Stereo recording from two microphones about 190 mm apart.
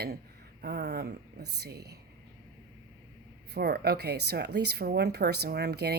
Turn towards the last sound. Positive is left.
turn(degrees=-60)  # may be behind; listen again after turning